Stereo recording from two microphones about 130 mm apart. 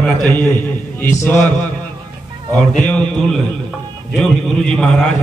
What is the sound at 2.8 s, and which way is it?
A man's voice, 10° left (ahead or behind).